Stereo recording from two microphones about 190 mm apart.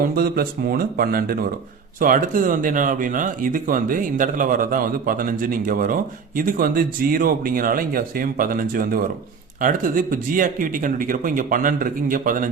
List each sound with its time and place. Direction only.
0.0 s speech: 50° right (ahead or behind)